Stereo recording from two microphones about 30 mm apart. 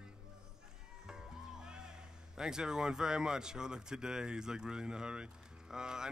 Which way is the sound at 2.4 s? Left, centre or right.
Right.